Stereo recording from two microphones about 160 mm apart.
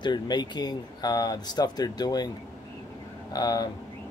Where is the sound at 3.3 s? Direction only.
25° left (ahead or behind).